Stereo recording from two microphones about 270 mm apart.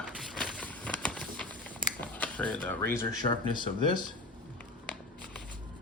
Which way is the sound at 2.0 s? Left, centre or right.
Centre.